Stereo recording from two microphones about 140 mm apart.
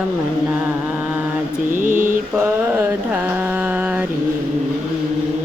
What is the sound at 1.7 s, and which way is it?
Mantra, 65° right (ahead or behind).